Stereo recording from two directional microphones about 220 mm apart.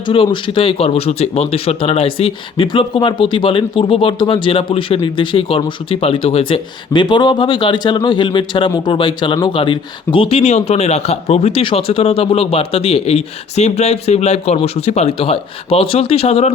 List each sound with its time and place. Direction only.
0.1 s speech: 25° left (ahead or behind)